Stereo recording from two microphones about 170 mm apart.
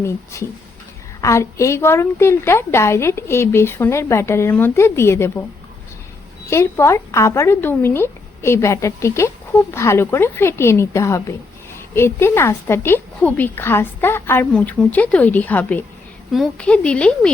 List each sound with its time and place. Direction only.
0.0 s a woman's voice: 15° left (ahead or behind)
6.5 s a woman's voice: 15° left (ahead or behind)